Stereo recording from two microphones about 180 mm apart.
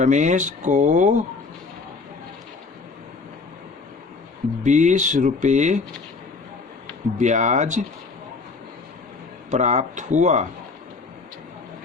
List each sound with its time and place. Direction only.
0.0 s speech: 40° right (ahead or behind)
4.6 s speech: 40° right (ahead or behind)
7.2 s speech: 40° right (ahead or behind)
9.5 s speech: 40° right (ahead or behind)